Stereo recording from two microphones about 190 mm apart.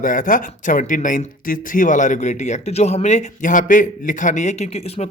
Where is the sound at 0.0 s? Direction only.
45° left (ahead or behind).